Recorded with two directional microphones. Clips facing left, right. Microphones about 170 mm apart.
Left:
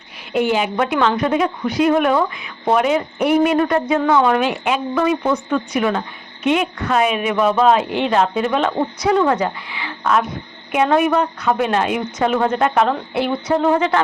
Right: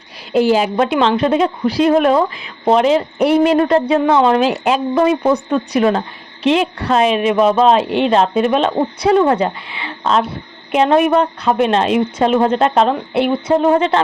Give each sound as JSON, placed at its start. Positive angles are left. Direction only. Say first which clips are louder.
{"t": 0.3, "sound": "a woman's voice", "louder": "right 4 dB", "side_deg": -35}